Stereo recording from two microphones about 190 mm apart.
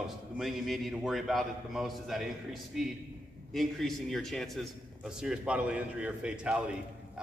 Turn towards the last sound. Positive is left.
turn(degrees=-5)  # may be behind; listen again after turning